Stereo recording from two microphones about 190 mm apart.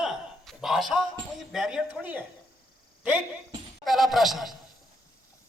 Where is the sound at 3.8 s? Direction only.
Centre (ahead or behind).